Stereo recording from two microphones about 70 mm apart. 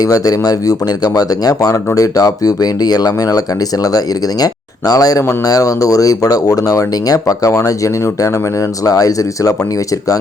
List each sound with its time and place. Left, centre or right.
0.0 s speech: left